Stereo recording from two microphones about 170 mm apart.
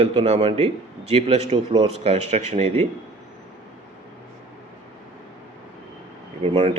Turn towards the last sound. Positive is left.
turn(degrees=-35)  # may be behind; listen again after turning